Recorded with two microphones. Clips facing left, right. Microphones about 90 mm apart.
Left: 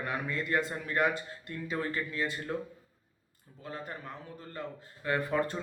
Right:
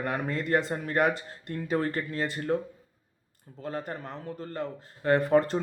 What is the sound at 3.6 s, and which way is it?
Speech, 50° right (ahead or behind).